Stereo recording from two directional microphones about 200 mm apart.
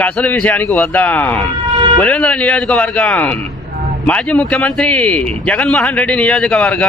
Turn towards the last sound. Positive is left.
turn(degrees=5)  # may be behind; listen again after turning